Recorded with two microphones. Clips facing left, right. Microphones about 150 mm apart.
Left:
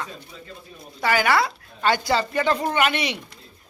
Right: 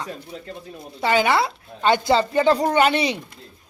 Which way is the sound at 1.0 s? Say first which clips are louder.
Right 2 dB; 25° right (ahead or behind).